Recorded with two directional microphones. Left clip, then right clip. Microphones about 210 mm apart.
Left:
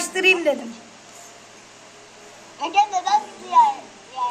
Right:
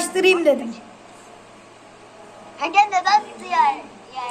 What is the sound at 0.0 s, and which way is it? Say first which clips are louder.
Speech: right 2 dB; 5° right (ahead or behind).